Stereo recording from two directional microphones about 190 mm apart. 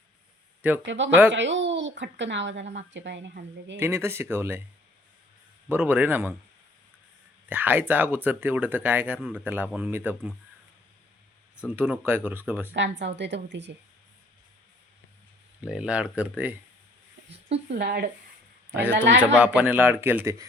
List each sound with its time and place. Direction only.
0.9 s a woman's voice: 75° right (ahead or behind)
3.8 s speech: 15° right (ahead or behind)
5.6 s speech: 10° right (ahead or behind)
7.4 s speech: 10° right (ahead or behind)
9.1 s speech: 5° left (ahead or behind)
9.4 s speech: 10° right (ahead or behind)
11.6 s speech: 10° right (ahead or behind)
12.7 s a woman's voice: 70° right (ahead or behind)
15.6 s speech: 5° right (ahead or behind)
17.7 s speech: 55° right (ahead or behind)
18.7 s speech: 10° right (ahead or behind)